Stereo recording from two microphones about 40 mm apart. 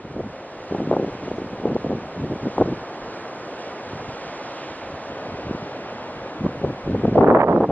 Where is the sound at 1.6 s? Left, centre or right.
Left.